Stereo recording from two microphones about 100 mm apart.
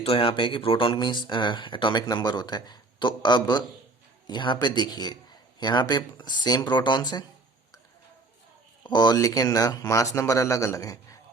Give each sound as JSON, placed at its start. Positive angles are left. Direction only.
{"t": 0.0, "sound": "speech", "side_deg": 70}
{"t": 8.8, "sound": "speech", "side_deg": 45}